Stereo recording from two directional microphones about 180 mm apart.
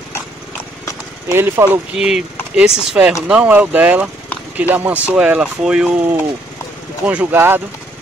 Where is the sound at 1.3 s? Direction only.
15° right (ahead or behind).